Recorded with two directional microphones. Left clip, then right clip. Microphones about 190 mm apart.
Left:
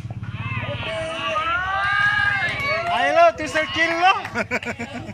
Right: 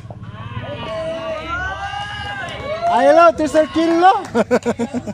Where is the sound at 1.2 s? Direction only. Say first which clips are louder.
Left 1 dB; 35° right (ahead or behind).